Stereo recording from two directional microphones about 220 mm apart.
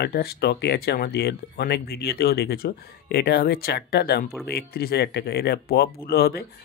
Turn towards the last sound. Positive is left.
turn(degrees=45)  # may be behind; listen again after turning